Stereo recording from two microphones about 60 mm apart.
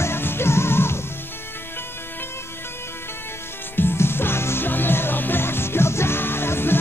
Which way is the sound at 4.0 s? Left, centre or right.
Left.